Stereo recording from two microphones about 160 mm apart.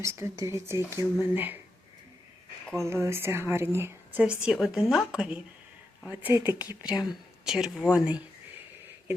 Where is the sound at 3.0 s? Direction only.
15° right (ahead or behind).